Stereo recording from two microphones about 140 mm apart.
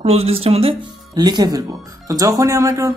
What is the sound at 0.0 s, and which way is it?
Speech, 45° right (ahead or behind).